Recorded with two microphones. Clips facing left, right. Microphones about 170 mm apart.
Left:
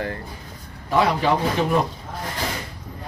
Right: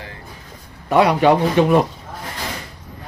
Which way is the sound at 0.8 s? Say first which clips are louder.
Right 6 dB; 75° right (ahead or behind).